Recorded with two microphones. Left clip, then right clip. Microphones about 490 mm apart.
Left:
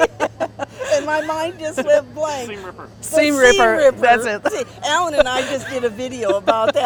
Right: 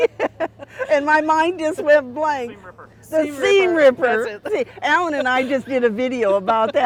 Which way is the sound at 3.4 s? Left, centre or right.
Right.